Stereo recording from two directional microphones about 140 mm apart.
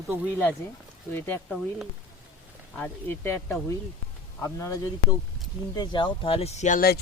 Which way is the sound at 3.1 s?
15° left (ahead or behind).